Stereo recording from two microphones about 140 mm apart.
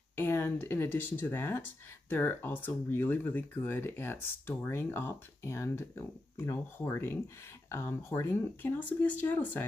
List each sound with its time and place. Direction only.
0.1 s speech: 15° left (ahead or behind)